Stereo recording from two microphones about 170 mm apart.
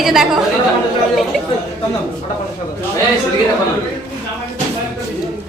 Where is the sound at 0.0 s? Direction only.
Centre (ahead or behind).